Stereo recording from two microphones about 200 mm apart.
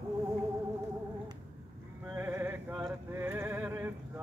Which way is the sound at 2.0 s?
10° right (ahead or behind).